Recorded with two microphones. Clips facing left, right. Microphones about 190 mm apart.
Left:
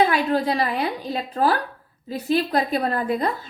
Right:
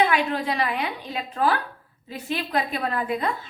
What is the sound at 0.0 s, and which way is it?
A woman's voice, 35° left (ahead or behind).